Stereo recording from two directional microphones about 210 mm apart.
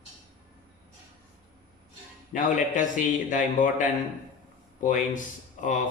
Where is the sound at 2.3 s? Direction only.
40° left (ahead or behind).